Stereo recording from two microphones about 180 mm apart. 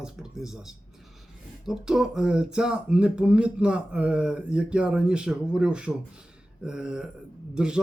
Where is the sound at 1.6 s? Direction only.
5° right (ahead or behind).